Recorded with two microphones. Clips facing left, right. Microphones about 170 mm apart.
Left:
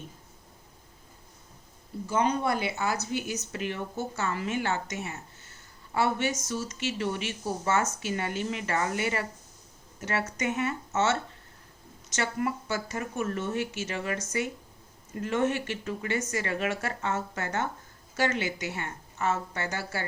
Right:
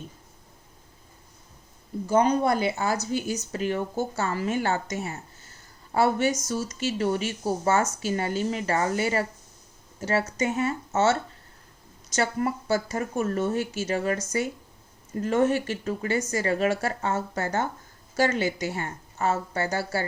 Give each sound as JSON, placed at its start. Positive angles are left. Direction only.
{"t": 2.0, "sound": "speech", "side_deg": -40}